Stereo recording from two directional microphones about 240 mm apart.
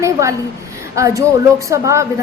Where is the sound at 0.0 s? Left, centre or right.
Centre.